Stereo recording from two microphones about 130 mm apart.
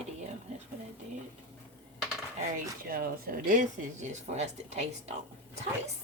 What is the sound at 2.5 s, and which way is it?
Speech, 90° right.